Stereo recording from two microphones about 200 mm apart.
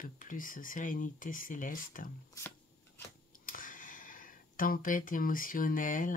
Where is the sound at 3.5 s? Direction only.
45° left (ahead or behind).